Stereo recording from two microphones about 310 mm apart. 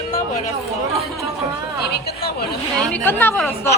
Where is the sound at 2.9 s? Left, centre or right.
Centre.